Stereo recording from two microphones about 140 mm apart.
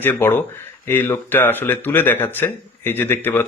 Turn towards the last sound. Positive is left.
turn(degrees=15)  # may be behind; listen again after turning